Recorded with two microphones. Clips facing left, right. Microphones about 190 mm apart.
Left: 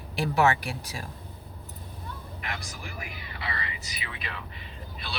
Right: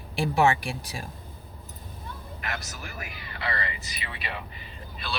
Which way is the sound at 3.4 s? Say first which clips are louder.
Right 4 dB; 65° right (ahead or behind).